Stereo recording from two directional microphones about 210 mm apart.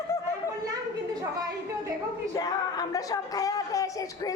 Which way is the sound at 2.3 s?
15° left (ahead or behind).